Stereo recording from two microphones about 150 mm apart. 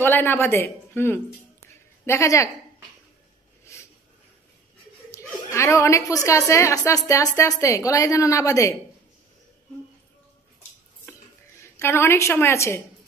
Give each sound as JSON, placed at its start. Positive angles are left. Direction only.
{"t": 0.0, "sound": "a woman's voice", "side_deg": 15}
{"t": 5.1, "sound": "a woman's voice", "side_deg": 20}
{"t": 11.1, "sound": "a sound", "side_deg": 15}